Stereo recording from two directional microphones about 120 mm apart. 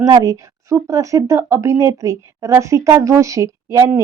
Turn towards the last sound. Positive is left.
turn(degrees=-25)  # may be behind; listen again after turning